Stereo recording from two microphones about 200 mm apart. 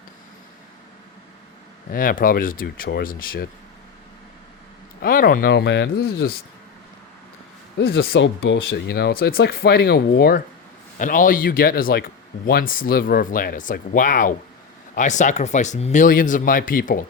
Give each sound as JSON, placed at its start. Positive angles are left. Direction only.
{"t": 1.9, "sound": "speech", "side_deg": 45}
{"t": 5.0, "sound": "speech", "side_deg": 45}
{"t": 7.8, "sound": "speech", "side_deg": 65}
{"t": 10.9, "sound": "speech", "side_deg": 40}